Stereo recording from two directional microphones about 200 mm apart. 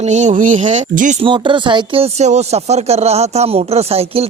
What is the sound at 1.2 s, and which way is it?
Speech, 25° right (ahead or behind).